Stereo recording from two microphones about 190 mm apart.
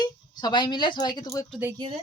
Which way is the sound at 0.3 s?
20° left (ahead or behind).